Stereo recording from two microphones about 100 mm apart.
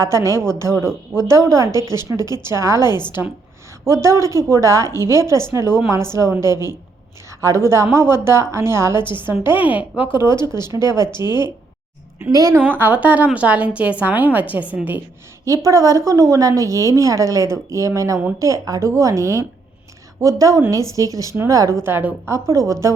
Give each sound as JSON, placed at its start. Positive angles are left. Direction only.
{"t": 0.0, "sound": "a woman's voice", "side_deg": -30}
{"t": 3.8, "sound": "a woman's voice", "side_deg": -30}
{"t": 6.5, "sound": "a woman's voice", "side_deg": 40}
{"t": 7.3, "sound": "a woman's voice", "side_deg": -30}
{"t": 9.0, "sound": "speech", "side_deg": 50}
{"t": 9.2, "sound": "a woman's voice", "side_deg": -20}
{"t": 10.8, "sound": "speech", "side_deg": 40}
{"t": 12.3, "sound": "a woman's voice", "side_deg": -40}
{"t": 12.5, "sound": "a woman's voice", "side_deg": -20}
{"t": 15.4, "sound": "a woman's voice", "side_deg": -30}